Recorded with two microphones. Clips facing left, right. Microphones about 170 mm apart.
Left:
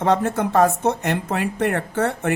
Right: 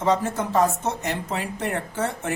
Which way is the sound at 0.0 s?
60° left (ahead or behind).